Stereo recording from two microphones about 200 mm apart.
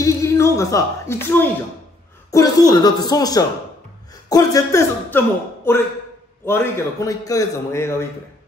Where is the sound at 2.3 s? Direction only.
20° left (ahead or behind).